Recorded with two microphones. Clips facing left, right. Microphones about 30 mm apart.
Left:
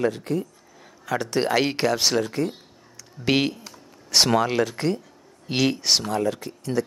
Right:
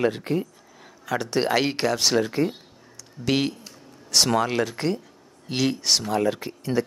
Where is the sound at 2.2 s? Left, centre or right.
Centre.